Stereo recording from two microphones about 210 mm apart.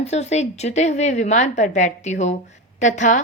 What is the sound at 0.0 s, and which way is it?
Speech, 30° left (ahead or behind).